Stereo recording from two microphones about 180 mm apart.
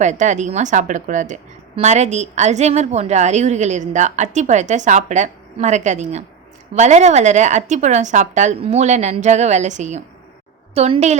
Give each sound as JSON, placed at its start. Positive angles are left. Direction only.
{"t": 0.0, "sound": "a woman's voice", "side_deg": -40}